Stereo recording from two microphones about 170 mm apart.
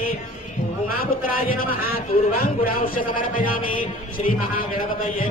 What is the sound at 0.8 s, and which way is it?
Speech, 60° left (ahead or behind).